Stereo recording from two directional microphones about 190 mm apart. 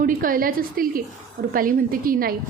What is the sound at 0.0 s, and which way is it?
A woman's voice, 45° right (ahead or behind).